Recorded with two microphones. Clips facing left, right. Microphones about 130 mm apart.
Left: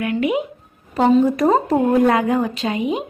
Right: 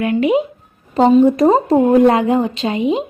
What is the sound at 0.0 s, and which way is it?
A woman's voice, 25° right (ahead or behind).